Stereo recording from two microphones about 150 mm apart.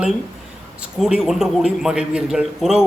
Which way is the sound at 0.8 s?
5° right (ahead or behind).